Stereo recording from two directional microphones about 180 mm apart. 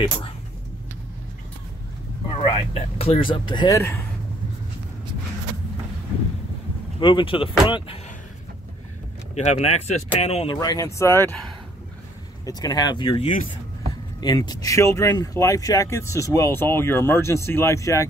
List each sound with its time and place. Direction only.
2.4 s speech: 30° left (ahead or behind); by 4.0 s 15° left (ahead or behind)
7.0 s speech: 25° left (ahead or behind)
9.3 s speech: 35° left (ahead or behind); by 11.3 s 15° left (ahead or behind)
12.4 s speech: 20° left (ahead or behind)